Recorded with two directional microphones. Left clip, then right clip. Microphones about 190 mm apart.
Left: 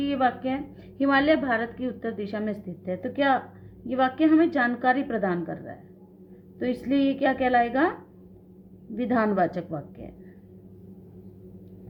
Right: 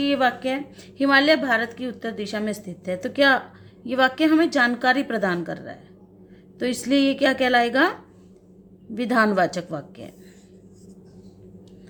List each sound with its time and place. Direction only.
0.0 s a woman's voice: 20° right (ahead or behind)
9.0 s a woman's voice: 20° right (ahead or behind)